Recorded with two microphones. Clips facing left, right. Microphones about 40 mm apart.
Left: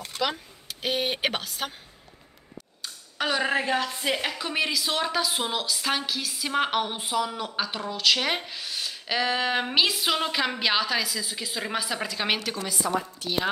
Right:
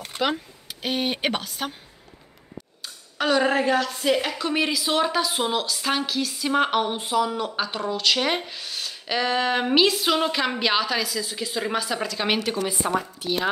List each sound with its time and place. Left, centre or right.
0.0 s a sound: right
0.8 s a woman's voice: centre
2.8 s a woman's voice: centre
12.8 s speech: right
13.2 s speech: centre